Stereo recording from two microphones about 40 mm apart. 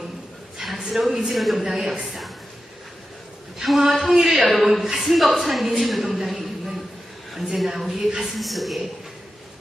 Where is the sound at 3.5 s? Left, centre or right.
Centre.